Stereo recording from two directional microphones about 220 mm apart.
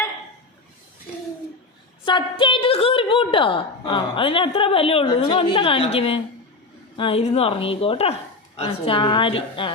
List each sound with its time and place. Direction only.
2.0 s a woman's voice: 25° left (ahead or behind)